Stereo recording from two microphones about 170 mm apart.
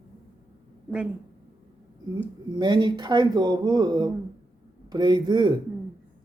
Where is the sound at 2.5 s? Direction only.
25° right (ahead or behind).